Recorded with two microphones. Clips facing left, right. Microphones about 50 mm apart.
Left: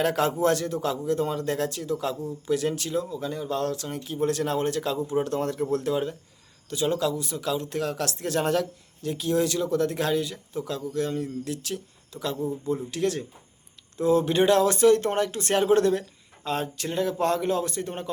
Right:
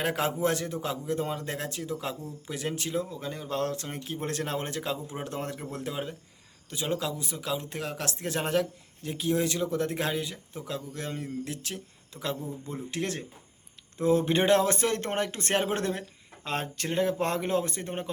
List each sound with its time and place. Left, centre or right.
0.0 s speech: centre